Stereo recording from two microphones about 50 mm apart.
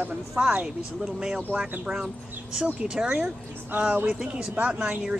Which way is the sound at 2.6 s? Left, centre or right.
Centre.